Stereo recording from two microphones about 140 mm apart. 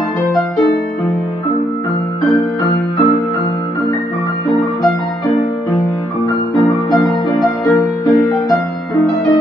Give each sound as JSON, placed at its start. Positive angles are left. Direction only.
{"t": 8.1, "sound": "music", "side_deg": 25}